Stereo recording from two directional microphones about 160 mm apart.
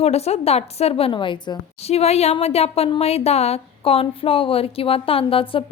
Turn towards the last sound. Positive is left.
turn(degrees=35)  # may be behind; listen again after turning